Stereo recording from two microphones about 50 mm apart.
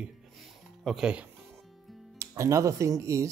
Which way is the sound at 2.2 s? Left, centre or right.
Right.